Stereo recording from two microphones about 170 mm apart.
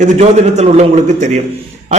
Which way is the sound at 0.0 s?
40° right (ahead or behind).